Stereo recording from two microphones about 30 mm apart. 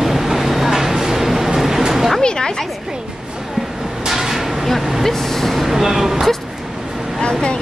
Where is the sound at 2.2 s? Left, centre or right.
Left.